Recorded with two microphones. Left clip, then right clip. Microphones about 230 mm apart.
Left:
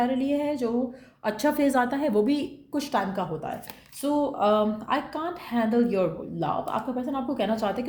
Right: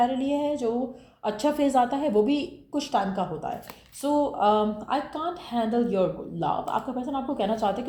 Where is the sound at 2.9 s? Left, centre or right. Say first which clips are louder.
Right 1 dB; left.